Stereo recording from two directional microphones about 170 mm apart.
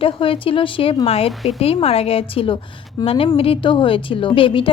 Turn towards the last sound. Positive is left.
turn(degrees=30)  # may be behind; listen again after turning